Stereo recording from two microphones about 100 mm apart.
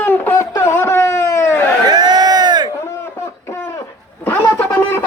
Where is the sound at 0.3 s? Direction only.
30° left (ahead or behind).